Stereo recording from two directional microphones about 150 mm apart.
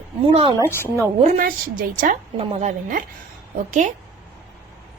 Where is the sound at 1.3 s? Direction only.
65° right (ahead or behind).